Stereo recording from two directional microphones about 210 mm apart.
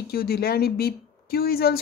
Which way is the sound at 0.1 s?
45° left (ahead or behind).